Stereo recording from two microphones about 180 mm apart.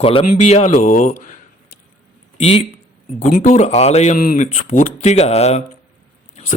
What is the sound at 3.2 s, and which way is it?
A man's voice, 45° left (ahead or behind).